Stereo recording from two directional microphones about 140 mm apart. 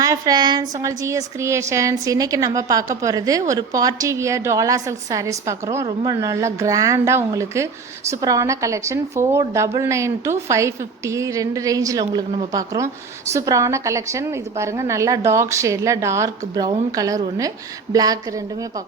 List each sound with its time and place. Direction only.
0.0 s a woman's voice: 25° right (ahead or behind)